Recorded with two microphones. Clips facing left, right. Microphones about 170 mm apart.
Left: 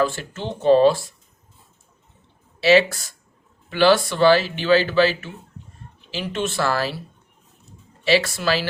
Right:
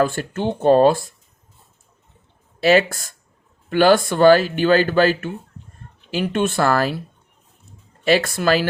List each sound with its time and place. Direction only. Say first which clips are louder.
0.0 s speech: right 3 dB; 55° right (ahead or behind)
2.6 s speech: even; 50° right (ahead or behind)
8.0 s speech: right 2 dB; 50° right (ahead or behind)